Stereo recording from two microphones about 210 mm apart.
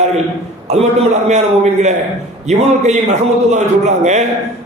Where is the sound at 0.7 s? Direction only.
30° right (ahead or behind).